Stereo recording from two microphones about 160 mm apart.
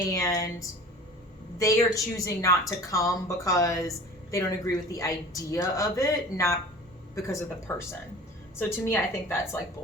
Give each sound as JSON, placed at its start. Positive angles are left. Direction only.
{"t": 0.1, "sound": "a woman's voice", "side_deg": 20}
{"t": 1.5, "sound": "a woman's voice", "side_deg": 20}